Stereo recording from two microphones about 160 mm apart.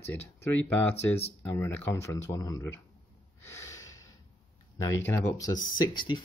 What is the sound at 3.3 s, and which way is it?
Snort, 15° left (ahead or behind).